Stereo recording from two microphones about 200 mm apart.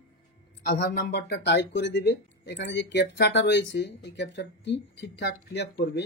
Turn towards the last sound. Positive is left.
turn(degrees=55)  # may be behind; listen again after turning